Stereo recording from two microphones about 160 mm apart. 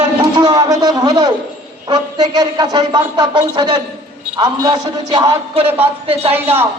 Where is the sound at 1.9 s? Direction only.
25° right (ahead or behind).